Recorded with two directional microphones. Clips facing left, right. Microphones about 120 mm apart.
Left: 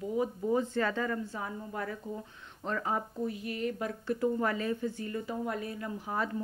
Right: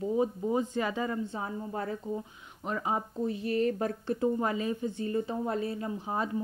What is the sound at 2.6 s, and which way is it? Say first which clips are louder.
Speech: right 1 dB; 15° right (ahead or behind).